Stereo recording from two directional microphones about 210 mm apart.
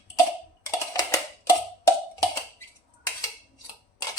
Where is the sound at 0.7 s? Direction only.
15° left (ahead or behind).